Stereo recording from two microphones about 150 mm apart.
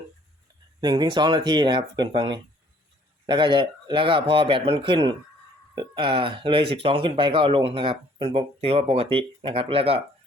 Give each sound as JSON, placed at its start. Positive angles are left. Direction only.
{"t": 0.8, "sound": "speech", "side_deg": -30}